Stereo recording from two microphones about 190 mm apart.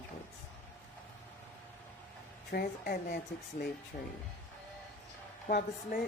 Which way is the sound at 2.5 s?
50° left (ahead or behind).